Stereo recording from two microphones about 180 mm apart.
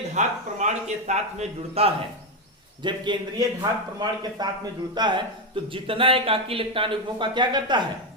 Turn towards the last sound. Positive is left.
turn(degrees=-25)  # may be behind; listen again after turning